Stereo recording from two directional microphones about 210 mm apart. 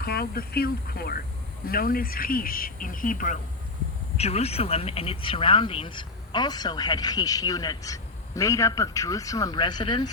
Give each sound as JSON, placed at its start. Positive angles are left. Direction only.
{"t": 0.0, "sound": "speech", "side_deg": 45}